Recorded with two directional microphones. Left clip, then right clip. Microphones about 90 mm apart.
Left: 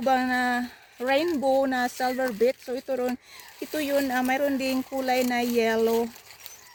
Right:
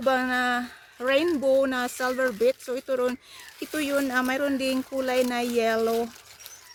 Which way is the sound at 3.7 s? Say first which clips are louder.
Left 1 dB; 15° right (ahead or behind).